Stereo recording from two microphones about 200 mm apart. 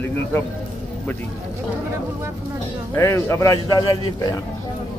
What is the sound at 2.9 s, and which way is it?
A man's voice, 15° left (ahead or behind).